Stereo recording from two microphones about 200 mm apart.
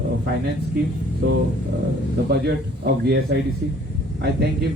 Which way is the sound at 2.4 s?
55° right (ahead or behind).